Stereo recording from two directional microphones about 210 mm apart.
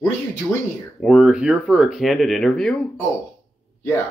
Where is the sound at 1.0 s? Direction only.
Centre (ahead or behind).